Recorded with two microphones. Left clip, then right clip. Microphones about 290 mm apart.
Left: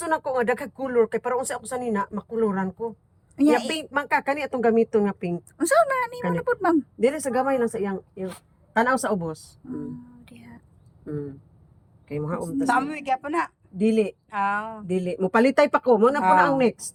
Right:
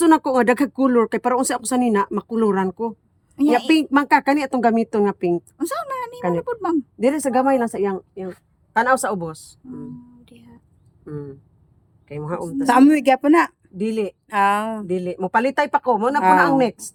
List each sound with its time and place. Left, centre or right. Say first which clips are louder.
0.3 s speech: right 7 dB; right
3.4 s speech: right 1 dB; centre
3.9 s speech: right 4 dB; right
5.5 s speech: left 5 dB; centre
7.0 s speech: right 7 dB; right
10.2 s a sound: left 1 dB; centre
11.0 s a sound: even; centre
12.0 s speech: right 2 dB; centre
12.6 s speech: right 10 dB; right
13.8 s speech: left 1 dB; centre
14.3 s speech: right 7 dB; right
14.8 s speech: right 2 dB; centre